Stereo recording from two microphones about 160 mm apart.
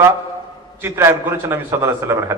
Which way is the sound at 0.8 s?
15° right (ahead or behind).